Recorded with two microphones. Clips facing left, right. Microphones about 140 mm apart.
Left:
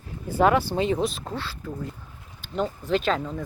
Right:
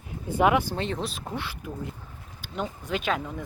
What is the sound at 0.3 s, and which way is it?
Speech, 15° right (ahead or behind).